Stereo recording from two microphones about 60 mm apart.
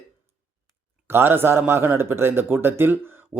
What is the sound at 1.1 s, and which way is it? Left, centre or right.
A man's voice, right.